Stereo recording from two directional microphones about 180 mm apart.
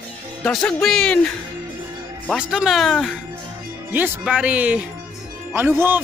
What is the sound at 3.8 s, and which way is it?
A man's voice, 10° right (ahead or behind).